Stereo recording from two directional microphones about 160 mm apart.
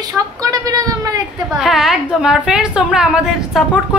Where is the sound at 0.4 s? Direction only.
20° right (ahead or behind).